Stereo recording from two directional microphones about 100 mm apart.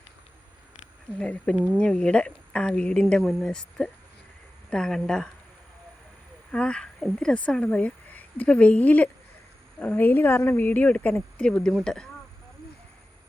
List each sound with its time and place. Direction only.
1.2 s speech: 10° left (ahead or behind)
1.5 s speech: 15° right (ahead or behind)
1.8 s speech: 10° left (ahead or behind)
6.5 s a woman's voice: 10° left (ahead or behind)
10.0 s speech: 20° left (ahead or behind)